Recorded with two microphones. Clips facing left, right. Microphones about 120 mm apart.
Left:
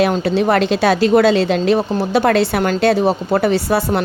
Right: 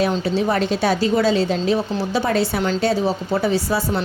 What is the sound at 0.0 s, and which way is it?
A woman's voice, 65° left (ahead or behind).